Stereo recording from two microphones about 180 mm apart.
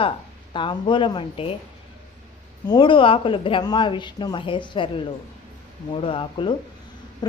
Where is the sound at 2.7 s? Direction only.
25° left (ahead or behind).